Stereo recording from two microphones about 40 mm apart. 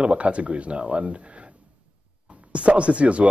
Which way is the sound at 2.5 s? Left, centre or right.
Right.